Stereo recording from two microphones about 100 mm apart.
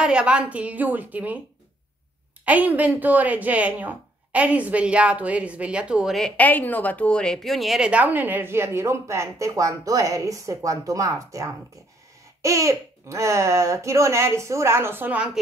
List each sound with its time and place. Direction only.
0.0 s a woman's voice: 10° right (ahead or behind)
2.4 s a woman's voice: 15° right (ahead or behind)
6.3 s a woman's voice: 15° left (ahead or behind); by 15.4 s 10° right (ahead or behind)